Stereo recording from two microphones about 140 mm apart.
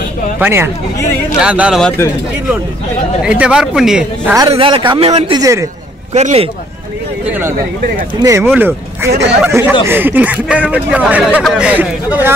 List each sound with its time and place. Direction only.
0.4 s a man's voice: 15° right (ahead or behind)
1.8 s a man's voice: 10° left (ahead or behind)
3.2 s speech: 5° right (ahead or behind)
4.5 s a man's voice: 40° right (ahead or behind)
5.3 s a man's voice: 25° right (ahead or behind)
6.1 s a man's voice: 50° right (ahead or behind)
7.2 s a man's voice: 15° right (ahead or behind)